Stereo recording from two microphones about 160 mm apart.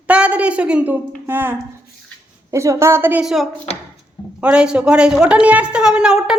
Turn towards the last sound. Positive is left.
turn(degrees=-5)  # may be behind; listen again after turning